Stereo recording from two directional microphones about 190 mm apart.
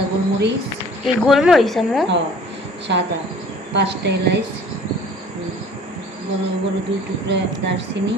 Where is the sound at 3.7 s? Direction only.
65° right (ahead or behind).